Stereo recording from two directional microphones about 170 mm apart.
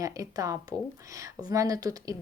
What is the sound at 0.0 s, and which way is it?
Speech, 20° right (ahead or behind).